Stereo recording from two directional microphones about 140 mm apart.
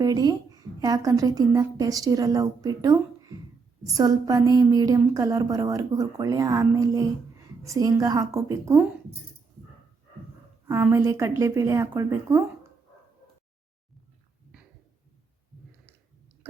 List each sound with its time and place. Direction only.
0.0 s a woman's voice: 25° right (ahead or behind)
10.9 s a woman's voice: 20° right (ahead or behind)